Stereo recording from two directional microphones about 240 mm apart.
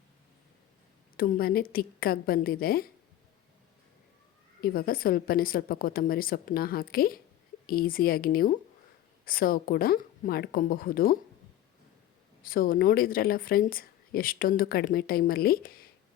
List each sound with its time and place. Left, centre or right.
1.1 s a woman's voice: left
4.6 s a woman's voice: left
12.4 s a woman's voice: left